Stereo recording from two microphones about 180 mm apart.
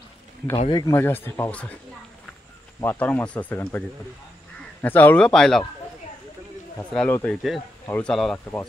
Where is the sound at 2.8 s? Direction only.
10° left (ahead or behind).